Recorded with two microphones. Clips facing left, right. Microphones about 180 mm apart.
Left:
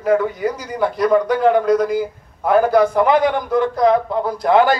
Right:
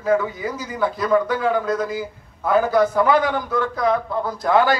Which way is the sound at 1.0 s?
15° left (ahead or behind).